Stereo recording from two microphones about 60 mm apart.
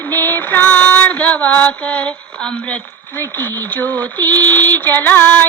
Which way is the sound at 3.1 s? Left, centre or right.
Left.